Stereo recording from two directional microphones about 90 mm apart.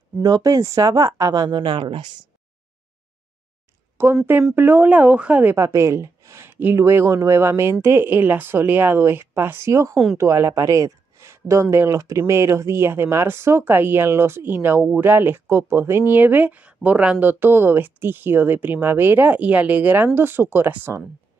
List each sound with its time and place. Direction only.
0.2 s speech: 45° right (ahead or behind); by 2.1 s 65° right (ahead or behind)
4.0 s speech: 25° right (ahead or behind)
5.7 s speech: 35° right (ahead or behind)